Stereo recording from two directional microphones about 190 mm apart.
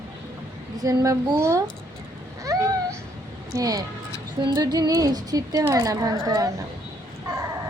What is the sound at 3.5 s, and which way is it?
A woman's voice, 20° right (ahead or behind).